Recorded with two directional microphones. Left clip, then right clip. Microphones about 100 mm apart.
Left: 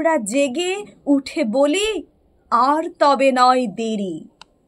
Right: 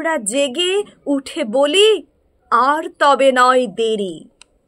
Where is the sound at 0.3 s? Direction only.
35° right (ahead or behind).